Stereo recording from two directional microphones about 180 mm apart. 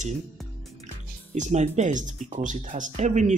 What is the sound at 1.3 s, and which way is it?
Speech, 40° right (ahead or behind).